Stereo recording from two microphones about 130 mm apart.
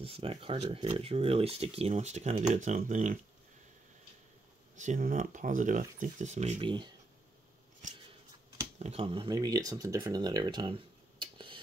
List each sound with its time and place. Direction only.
0.0 s speech: 45° right (ahead or behind); by 3.2 s 75° right (ahead or behind)
4.7 s speech: 80° right; by 6.5 s 65° right (ahead or behind)
6.6 s speech: 40° right (ahead or behind)
8.7 s speech: 55° right (ahead or behind)
9.3 s speech: 30° right (ahead or behind)